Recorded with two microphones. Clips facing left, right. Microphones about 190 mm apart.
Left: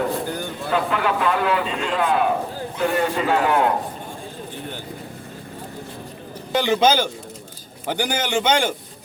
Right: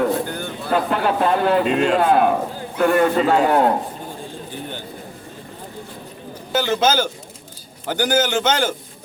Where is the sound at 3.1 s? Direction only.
40° right (ahead or behind).